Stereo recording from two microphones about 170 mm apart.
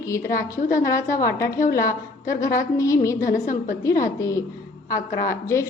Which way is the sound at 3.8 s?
20° left (ahead or behind).